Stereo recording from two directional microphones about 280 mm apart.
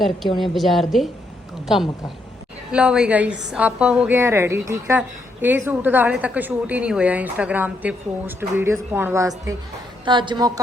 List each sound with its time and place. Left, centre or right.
0.3 s a woman's voice: centre